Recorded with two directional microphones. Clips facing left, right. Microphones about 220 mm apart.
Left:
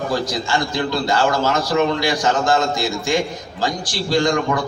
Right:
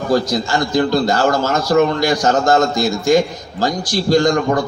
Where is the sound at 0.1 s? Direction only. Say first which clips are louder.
Right 8 dB; 40° right (ahead or behind).